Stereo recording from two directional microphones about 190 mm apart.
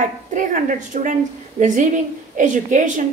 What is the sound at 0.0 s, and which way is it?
A woman's voice, 40° right (ahead or behind).